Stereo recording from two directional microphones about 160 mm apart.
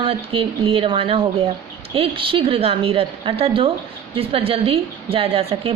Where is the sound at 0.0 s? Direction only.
35° right (ahead or behind).